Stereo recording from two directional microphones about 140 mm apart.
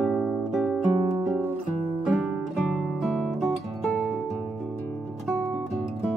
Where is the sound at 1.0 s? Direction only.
30° right (ahead or behind).